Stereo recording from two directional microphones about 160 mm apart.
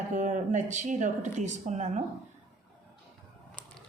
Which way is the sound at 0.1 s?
50° right (ahead or behind).